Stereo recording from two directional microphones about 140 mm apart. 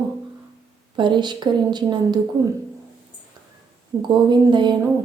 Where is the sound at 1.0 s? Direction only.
35° right (ahead or behind).